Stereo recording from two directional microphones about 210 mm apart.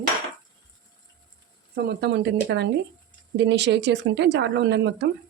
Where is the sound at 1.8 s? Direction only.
55° right (ahead or behind).